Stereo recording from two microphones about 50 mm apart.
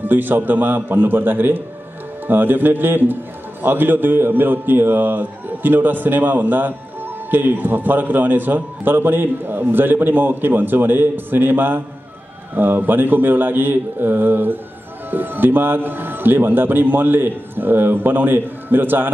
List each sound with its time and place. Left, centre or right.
0.0 s a man's voice: right